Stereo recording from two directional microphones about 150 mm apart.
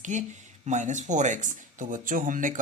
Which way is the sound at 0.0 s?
55° right (ahead or behind).